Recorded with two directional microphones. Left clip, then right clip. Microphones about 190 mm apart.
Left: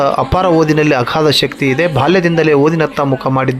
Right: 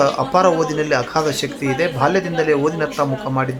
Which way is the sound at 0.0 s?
30° left (ahead or behind).